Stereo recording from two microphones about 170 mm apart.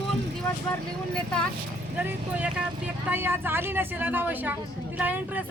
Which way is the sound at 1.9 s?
10° right (ahead or behind).